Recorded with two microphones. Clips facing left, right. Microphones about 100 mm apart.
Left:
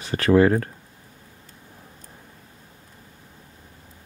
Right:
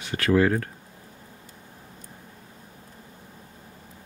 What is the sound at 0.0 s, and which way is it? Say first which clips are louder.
Speech: left 4 dB; 35° left (ahead or behind).